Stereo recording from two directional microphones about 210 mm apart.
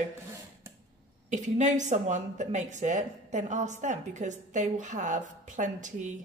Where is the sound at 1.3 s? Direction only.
35° right (ahead or behind).